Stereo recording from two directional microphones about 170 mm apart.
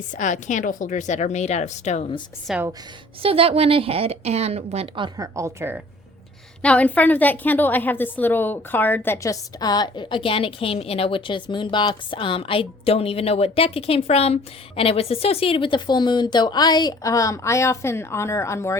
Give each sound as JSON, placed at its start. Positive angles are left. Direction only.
{"t": 0.1, "sound": "a woman's voice", "side_deg": 45}
{"t": 2.5, "sound": "a woman's voice", "side_deg": 0}
{"t": 3.2, "sound": "a woman's voice", "side_deg": -35}
{"t": 6.6, "sound": "a woman's voice", "side_deg": 5}